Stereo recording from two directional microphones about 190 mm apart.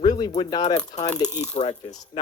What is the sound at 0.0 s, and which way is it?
Speech, 20° left (ahead or behind).